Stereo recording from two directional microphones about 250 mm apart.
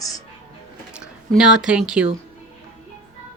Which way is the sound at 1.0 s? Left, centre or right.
Centre.